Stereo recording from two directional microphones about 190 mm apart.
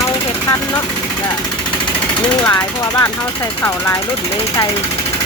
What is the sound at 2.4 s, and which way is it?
Speech, 15° left (ahead or behind).